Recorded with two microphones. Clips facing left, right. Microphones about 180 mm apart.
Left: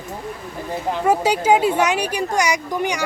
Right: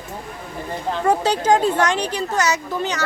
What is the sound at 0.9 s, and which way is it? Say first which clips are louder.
A woman's voice: left 1 dB; 10° left (ahead or behind).